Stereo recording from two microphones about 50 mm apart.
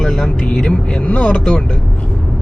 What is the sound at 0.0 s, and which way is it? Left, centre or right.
Speech, centre.